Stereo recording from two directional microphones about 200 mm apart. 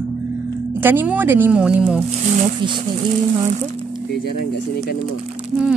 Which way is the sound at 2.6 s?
25° right (ahead or behind).